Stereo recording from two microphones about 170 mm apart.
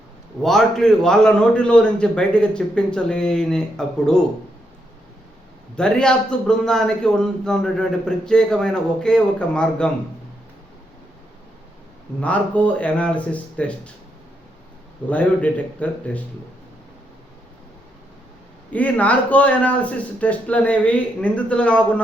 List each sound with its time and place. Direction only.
0.4 s a man's voice: 5° left (ahead or behind)
5.7 s a man's voice: 5° left (ahead or behind)
12.2 s speech: 10° left (ahead or behind)
15.1 s speech: 10° left (ahead or behind)
18.7 s speech: 10° left (ahead or behind)